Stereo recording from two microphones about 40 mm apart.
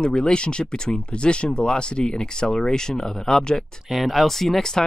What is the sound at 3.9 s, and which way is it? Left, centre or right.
Speech, centre.